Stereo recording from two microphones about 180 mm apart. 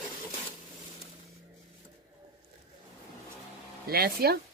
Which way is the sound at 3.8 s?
60° right (ahead or behind).